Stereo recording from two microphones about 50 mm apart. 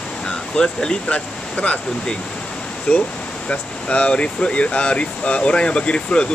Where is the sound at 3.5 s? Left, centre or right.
Left.